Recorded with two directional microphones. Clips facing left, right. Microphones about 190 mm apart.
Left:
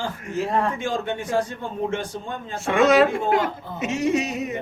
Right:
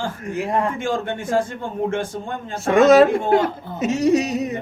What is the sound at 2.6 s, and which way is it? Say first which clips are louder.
A man's voice: right 5 dB; 40° right (ahead or behind).